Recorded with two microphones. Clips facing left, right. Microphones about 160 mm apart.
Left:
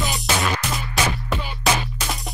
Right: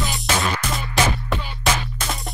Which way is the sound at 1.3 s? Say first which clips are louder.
Left 1 dB; 15° left (ahead or behind).